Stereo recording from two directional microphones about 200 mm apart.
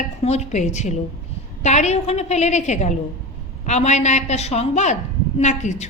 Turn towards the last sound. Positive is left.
turn(degrees=35)  # may be behind; listen again after turning